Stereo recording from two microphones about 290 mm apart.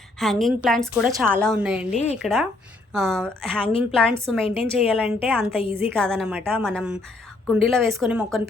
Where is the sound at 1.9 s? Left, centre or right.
Left.